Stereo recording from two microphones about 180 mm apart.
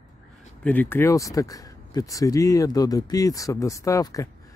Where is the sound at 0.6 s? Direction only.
10° left (ahead or behind).